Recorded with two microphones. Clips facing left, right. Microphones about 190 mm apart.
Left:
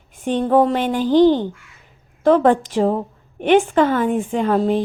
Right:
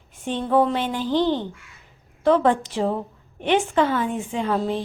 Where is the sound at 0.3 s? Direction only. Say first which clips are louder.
Left 5 dB; 45° left (ahead or behind).